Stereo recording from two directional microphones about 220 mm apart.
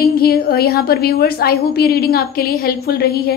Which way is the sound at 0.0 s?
45° left (ahead or behind).